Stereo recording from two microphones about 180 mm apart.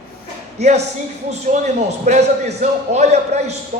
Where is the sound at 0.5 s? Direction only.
35° right (ahead or behind).